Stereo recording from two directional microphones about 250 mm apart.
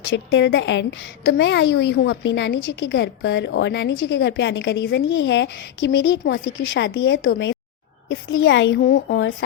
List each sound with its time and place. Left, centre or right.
0.0 s a woman's voice: left